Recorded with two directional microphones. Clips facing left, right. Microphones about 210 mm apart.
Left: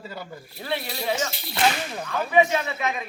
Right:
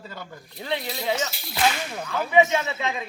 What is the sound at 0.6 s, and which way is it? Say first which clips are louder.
Speech: even; 20° right (ahead or behind).